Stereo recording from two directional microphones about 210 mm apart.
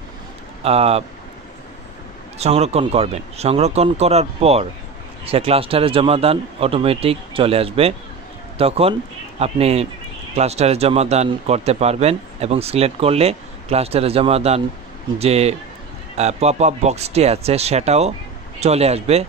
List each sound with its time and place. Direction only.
0.7 s speech: 30° right (ahead or behind)
2.3 s speech: 30° right (ahead or behind)